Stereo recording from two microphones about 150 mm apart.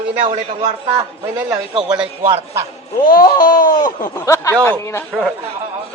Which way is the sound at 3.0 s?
75° left (ahead or behind).